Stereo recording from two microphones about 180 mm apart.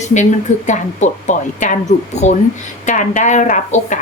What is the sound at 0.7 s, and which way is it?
A woman's voice, 40° left (ahead or behind).